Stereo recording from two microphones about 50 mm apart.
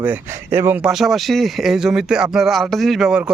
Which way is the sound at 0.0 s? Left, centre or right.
Right.